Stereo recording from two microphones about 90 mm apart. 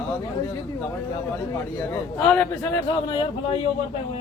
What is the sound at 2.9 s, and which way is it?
Speech, 65° left (ahead or behind).